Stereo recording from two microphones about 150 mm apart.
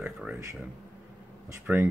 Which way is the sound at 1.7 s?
15° right (ahead or behind).